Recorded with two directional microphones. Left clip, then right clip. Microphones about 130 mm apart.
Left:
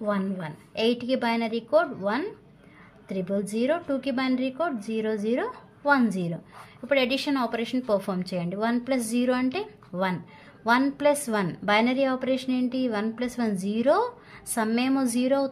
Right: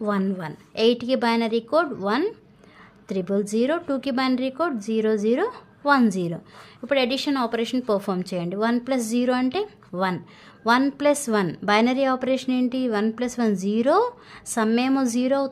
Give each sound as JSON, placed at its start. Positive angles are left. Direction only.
{"t": 0.0, "sound": "a woman's voice", "side_deg": -40}
{"t": 6.9, "sound": "a woman's voice", "side_deg": -30}